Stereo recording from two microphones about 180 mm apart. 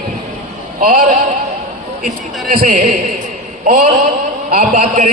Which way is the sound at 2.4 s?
50° right (ahead or behind).